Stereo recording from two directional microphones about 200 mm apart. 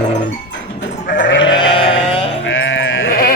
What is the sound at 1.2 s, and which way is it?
Sheep, 65° left (ahead or behind).